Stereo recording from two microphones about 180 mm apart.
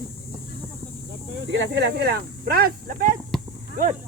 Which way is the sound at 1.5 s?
65° right (ahead or behind).